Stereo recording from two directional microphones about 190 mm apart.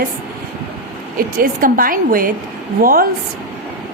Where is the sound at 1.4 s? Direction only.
45° right (ahead or behind).